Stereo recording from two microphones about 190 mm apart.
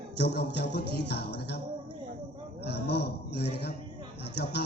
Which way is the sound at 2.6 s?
60° left (ahead or behind).